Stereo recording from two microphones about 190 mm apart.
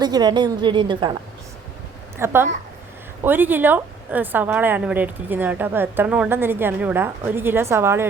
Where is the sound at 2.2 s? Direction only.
10° right (ahead or behind).